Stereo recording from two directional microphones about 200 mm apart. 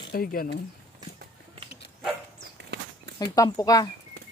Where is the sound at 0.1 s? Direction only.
45° left (ahead or behind).